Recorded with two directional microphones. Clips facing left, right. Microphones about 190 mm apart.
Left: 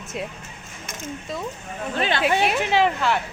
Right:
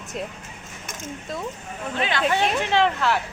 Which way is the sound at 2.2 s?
10° left (ahead or behind).